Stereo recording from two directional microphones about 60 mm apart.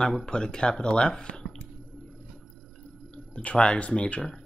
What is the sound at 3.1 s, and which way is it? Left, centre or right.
Speech, left.